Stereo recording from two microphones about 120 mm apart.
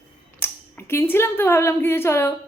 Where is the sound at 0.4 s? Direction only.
20° left (ahead or behind).